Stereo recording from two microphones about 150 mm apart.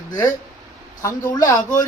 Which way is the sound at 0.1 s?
20° left (ahead or behind).